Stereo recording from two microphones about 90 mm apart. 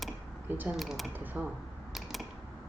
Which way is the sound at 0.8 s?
Centre (ahead or behind).